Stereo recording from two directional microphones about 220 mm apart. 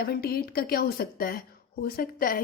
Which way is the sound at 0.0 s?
45° left (ahead or behind).